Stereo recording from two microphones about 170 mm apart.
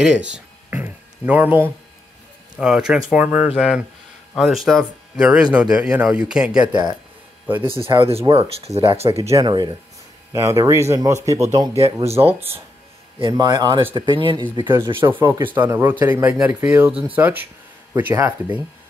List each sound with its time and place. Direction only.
0.0 s a sound: 5° right (ahead or behind)
2.5 s speech: 5° right (ahead or behind)
6.7 s speech: 25° right (ahead or behind)
9.3 s speech: 25° right (ahead or behind)
11.7 s speech: 35° right (ahead or behind)
12.4 s speech: 15° right (ahead or behind)
15.0 s speech: 15° right (ahead or behind)